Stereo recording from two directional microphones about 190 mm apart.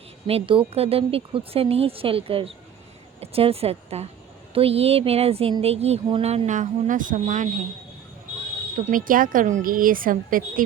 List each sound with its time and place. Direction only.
0.3 s speech: 30° right (ahead or behind)
8.8 s a woman's voice: 45° right (ahead or behind)